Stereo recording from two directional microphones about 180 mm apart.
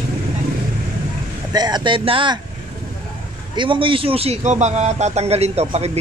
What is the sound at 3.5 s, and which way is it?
Speech, 30° right (ahead or behind).